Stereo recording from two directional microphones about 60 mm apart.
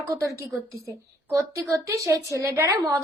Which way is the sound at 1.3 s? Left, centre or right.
Right.